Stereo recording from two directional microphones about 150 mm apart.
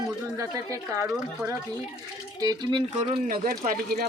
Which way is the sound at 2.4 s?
25° right (ahead or behind).